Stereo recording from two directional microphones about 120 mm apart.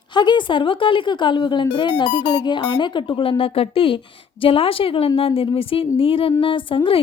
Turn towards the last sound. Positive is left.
turn(degrees=45)  # may be behind; listen again after turning